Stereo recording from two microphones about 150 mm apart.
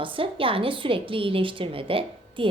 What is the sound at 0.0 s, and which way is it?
A woman's voice, 35° right (ahead or behind).